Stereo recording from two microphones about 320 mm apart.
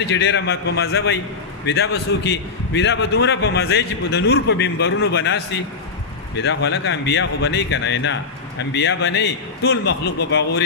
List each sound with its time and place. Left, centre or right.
0.0 s speech: left